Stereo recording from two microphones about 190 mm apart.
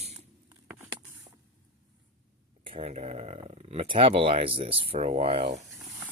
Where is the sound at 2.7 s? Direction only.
30° right (ahead or behind).